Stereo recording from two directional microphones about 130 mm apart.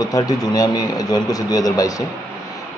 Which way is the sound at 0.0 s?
30° left (ahead or behind).